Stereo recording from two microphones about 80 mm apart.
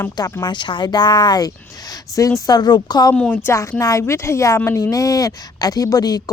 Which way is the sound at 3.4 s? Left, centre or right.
Left.